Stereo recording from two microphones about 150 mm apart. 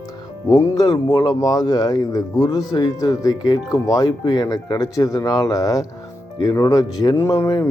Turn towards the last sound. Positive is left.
turn(degrees=20)  # may be behind; listen again after turning